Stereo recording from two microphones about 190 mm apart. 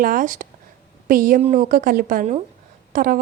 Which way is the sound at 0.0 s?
45° right (ahead or behind).